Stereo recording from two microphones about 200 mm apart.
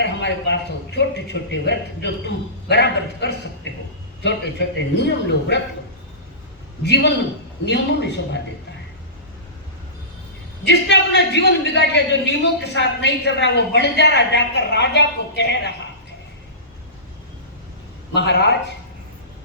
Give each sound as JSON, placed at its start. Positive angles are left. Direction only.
{"t": 0.0, "sound": "a man's voice", "side_deg": 60}
{"t": 4.9, "sound": "a man's voice", "side_deg": 60}
{"t": 6.8, "sound": "a man's voice", "side_deg": 60}
{"t": 10.7, "sound": "a man's voice", "side_deg": 60}
{"t": 18.1, "sound": "a man's voice", "side_deg": 60}